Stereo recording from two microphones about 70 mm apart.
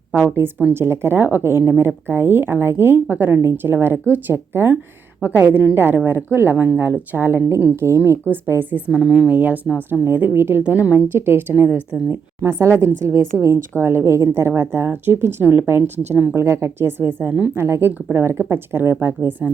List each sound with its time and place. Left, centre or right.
0.1 s a woman's voice: right
8.3 s speech: right
8.9 s a woman's voice: centre
9.3 s a woman's voice: right